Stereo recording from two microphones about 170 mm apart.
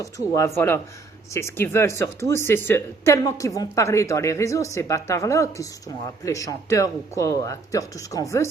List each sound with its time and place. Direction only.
0.0 s speech: 15° left (ahead or behind)